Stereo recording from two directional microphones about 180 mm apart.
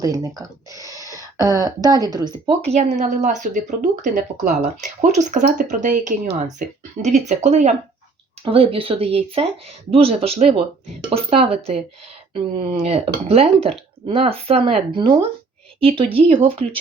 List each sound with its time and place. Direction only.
0.0 s speech: 20° right (ahead or behind)
0.9 s a sound: 20° left (ahead or behind)
1.4 s a woman's voice: 20° right (ahead or behind)